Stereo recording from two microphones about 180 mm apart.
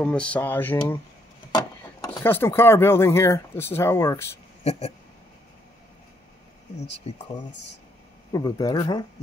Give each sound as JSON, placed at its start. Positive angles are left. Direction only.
{"t": 0.0, "sound": "speech", "side_deg": 5}
{"t": 4.6, "sound": "speech", "side_deg": 35}
{"t": 7.0, "sound": "speech", "side_deg": 35}
{"t": 8.3, "sound": "speech", "side_deg": 20}